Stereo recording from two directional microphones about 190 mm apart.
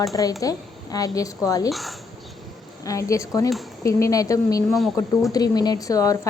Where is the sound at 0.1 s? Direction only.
20° left (ahead or behind).